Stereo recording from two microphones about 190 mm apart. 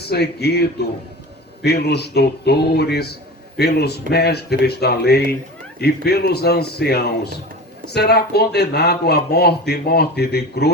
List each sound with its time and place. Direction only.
0.0 s speech: 60° left (ahead or behind)